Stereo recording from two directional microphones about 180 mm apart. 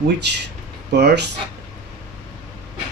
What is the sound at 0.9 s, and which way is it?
Speech, 65° right (ahead or behind).